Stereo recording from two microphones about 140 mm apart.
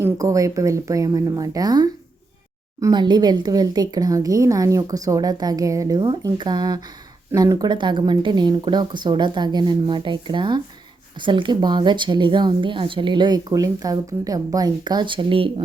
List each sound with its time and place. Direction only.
0.0 s a woman's voice: 25° right (ahead or behind); by 15.6 s 40° right (ahead or behind)